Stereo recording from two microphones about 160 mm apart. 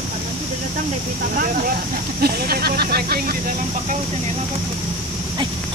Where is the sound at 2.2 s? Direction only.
75° right (ahead or behind).